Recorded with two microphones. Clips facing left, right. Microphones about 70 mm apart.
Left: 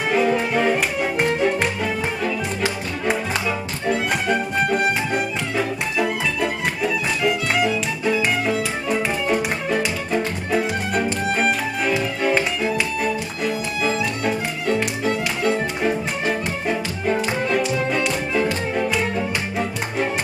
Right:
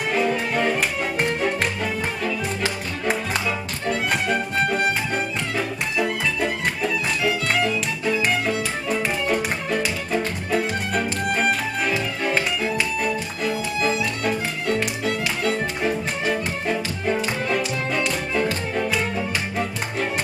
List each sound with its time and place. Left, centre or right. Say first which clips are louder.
0.1 s music: left 3 dB; centre